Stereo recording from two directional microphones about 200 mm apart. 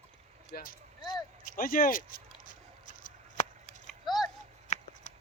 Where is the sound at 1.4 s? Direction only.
45° left (ahead or behind).